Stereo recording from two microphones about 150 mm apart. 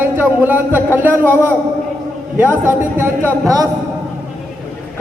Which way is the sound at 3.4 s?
25° right (ahead or behind).